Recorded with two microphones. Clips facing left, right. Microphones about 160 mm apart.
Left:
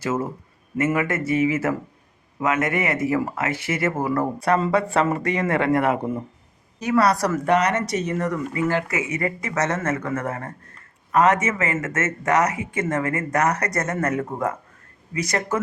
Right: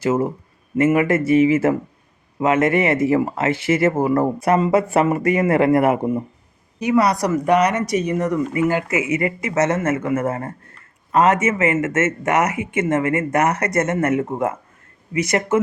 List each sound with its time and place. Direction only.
0.0 s speech: 30° right (ahead or behind)